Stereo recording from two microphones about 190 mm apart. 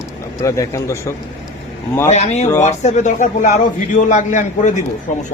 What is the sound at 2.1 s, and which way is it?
A man's voice, 35° left (ahead or behind).